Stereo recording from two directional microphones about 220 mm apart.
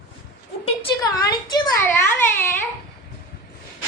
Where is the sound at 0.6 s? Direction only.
20° left (ahead or behind).